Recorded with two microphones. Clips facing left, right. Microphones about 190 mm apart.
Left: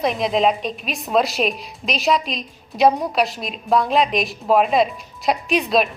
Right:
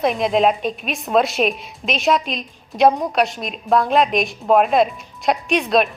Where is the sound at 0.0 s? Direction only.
Centre (ahead or behind).